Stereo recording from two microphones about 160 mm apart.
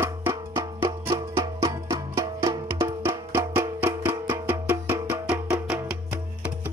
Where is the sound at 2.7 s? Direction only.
15° right (ahead or behind).